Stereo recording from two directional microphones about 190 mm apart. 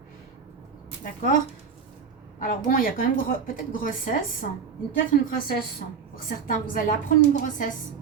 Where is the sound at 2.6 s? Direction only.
45° left (ahead or behind).